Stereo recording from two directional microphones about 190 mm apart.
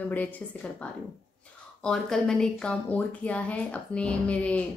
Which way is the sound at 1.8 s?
5° left (ahead or behind).